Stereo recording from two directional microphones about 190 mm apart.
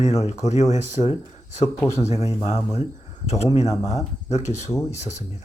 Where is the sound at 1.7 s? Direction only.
15° left (ahead or behind).